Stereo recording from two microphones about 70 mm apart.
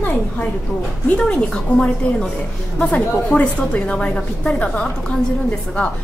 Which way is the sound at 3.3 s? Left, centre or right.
Centre.